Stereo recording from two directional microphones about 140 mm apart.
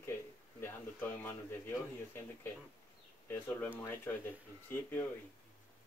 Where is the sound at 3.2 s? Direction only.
15° left (ahead or behind).